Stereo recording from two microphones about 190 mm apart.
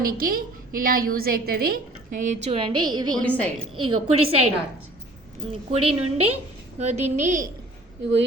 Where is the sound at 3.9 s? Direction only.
30° right (ahead or behind).